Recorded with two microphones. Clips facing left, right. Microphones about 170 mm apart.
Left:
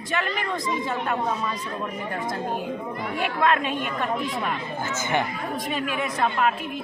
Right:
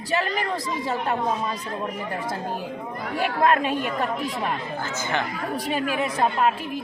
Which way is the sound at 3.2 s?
40° right (ahead or behind).